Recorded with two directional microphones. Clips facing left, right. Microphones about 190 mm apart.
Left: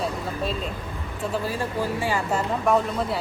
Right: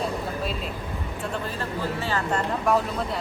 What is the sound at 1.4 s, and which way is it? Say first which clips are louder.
Speech: left 3 dB; 15° left (ahead or behind).